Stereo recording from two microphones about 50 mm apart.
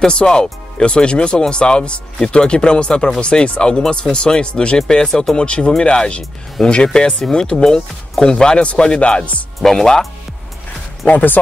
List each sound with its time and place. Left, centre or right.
0.0 s speech: centre
9.6 s speech: centre
11.1 s speech: left